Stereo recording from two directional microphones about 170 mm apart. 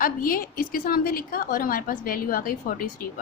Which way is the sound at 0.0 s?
55° left (ahead or behind).